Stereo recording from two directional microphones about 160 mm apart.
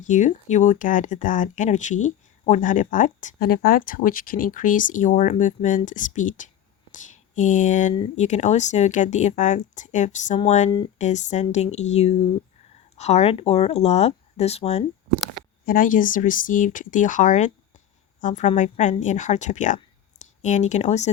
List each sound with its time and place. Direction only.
0.0 s speech: 50° left (ahead or behind)
15.6 s a woman's voice: 60° left (ahead or behind)